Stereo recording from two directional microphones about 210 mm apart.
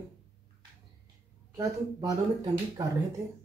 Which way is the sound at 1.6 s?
15° right (ahead or behind).